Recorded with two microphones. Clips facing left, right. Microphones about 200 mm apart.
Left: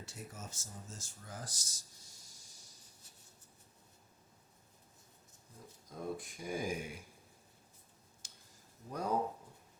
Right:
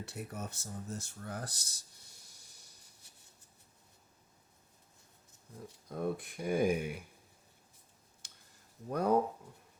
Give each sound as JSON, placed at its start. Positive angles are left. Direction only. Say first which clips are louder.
{"t": 0.0, "sound": "speech", "louder": "right 7 dB", "side_deg": -60}
{"t": 5.9, "sound": "speech", "louder": "right 6 dB", "side_deg": -60}
{"t": 8.2, "sound": "a sound", "louder": "right 1 dB", "side_deg": -60}
{"t": 8.9, "sound": "speech", "louder": "right 7 dB", "side_deg": -60}